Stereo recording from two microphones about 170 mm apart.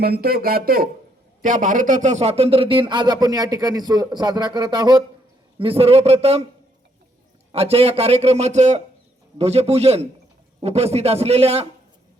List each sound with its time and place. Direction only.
0.0 s a man's voice: 65° right (ahead or behind); by 6.4 s 35° right (ahead or behind)
7.5 s a man's voice: 35° right (ahead or behind)